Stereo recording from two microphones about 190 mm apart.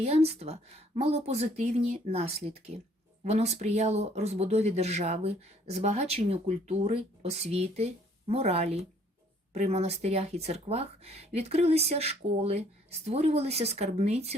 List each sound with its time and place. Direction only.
0.0 s speech: 30° right (ahead or behind)